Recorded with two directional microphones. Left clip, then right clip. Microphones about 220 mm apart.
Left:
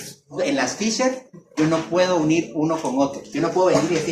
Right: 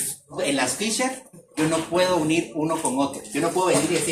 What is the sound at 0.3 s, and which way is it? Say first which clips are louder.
Speech: left 2 dB; 20° left (ahead or behind).